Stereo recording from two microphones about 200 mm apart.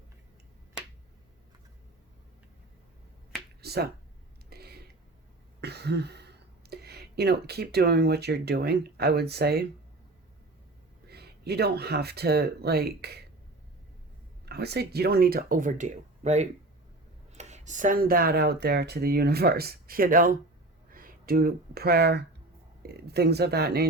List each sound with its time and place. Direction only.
3.6 s finger snapping: 55° right (ahead or behind)
4.4 s a sound: 50° right (ahead or behind)
5.5 s speech: 55° right (ahead or behind)
11.1 s speech: 55° right (ahead or behind)
14.4 s speech: 55° right (ahead or behind)